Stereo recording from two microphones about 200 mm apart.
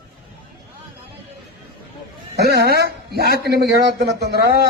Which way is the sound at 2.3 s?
55° right (ahead or behind).